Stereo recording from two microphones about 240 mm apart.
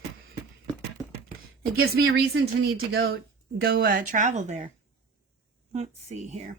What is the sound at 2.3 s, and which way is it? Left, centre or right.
Speech, right.